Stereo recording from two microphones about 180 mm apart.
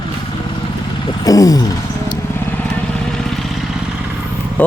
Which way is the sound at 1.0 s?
20° left (ahead or behind).